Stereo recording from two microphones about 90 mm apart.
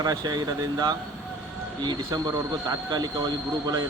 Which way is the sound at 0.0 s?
45° right (ahead or behind).